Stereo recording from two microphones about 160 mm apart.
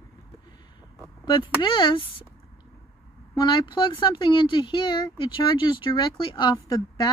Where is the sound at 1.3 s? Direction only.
30° left (ahead or behind).